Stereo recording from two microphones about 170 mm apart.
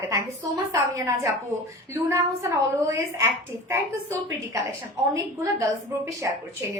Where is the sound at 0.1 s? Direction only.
20° right (ahead or behind).